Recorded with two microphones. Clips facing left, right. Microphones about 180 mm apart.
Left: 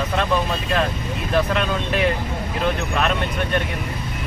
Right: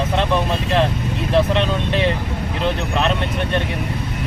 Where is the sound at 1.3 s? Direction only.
30° right (ahead or behind).